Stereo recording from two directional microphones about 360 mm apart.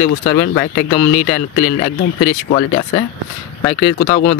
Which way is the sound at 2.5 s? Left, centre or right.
Centre.